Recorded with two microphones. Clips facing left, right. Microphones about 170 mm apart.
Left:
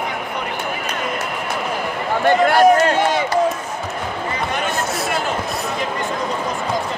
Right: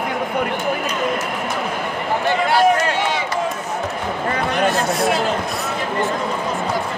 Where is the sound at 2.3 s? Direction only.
50° left (ahead or behind).